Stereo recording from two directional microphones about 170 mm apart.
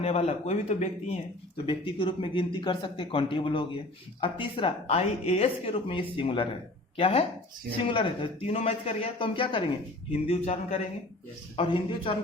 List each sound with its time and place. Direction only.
0.0 s speech: 35° left (ahead or behind)
1.6 s speech: 30° left (ahead or behind)